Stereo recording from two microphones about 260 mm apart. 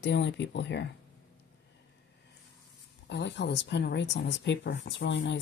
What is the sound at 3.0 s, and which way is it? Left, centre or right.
Speech, left.